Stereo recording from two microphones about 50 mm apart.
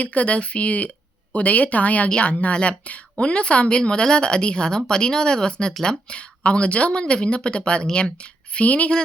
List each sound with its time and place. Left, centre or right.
0.0 s speech: left